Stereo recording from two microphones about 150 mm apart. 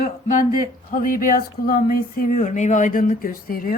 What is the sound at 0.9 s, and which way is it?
Speech, 65° left (ahead or behind).